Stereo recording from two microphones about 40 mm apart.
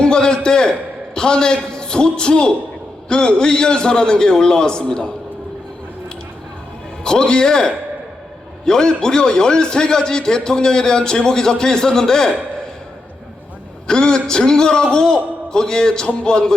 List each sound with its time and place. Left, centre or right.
0.0 s a sound: left
3.1 s a man's voice: left
7.0 s a man's voice: centre
13.8 s a man's voice: centre